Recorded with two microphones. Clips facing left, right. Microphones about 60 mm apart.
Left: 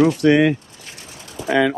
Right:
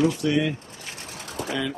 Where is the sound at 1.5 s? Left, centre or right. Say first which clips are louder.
Left 12 dB; left.